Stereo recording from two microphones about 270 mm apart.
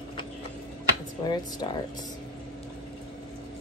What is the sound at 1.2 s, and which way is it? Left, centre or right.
Speech, centre.